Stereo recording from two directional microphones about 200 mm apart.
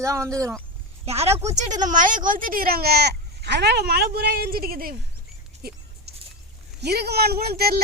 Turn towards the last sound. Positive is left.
turn(degrees=-50)  # may be behind; listen again after turning